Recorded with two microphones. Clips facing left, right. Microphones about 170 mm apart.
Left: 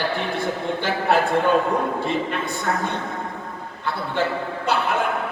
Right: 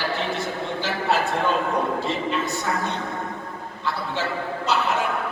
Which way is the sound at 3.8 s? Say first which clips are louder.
Left 3 dB; 55° left (ahead or behind).